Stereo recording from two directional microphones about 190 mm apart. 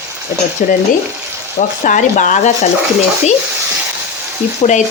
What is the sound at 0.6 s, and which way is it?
Frying, 45° left (ahead or behind).